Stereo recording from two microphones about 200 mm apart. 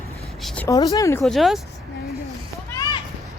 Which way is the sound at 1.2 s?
Centre (ahead or behind).